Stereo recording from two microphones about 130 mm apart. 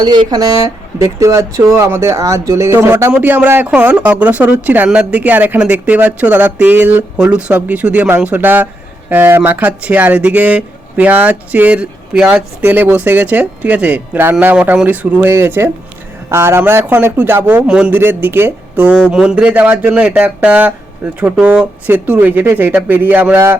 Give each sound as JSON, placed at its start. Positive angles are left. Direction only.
{"t": 0.0, "sound": "speech", "side_deg": -35}